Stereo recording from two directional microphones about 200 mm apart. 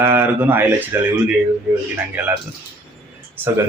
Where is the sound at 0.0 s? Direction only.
10° right (ahead or behind).